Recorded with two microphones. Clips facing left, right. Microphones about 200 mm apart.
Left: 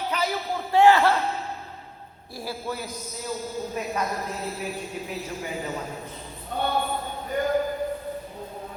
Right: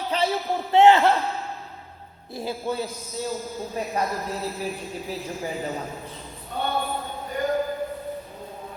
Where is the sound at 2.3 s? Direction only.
20° right (ahead or behind).